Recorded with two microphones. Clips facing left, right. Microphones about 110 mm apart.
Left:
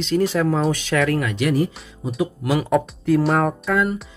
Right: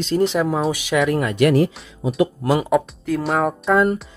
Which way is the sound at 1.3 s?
70° right (ahead or behind).